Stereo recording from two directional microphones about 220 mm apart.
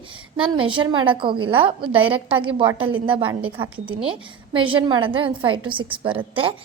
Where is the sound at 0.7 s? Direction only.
20° right (ahead or behind).